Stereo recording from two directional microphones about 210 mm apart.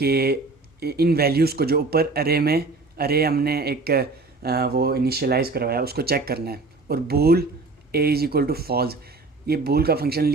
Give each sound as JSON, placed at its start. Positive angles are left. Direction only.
{"t": 0.0, "sound": "speech", "side_deg": -45}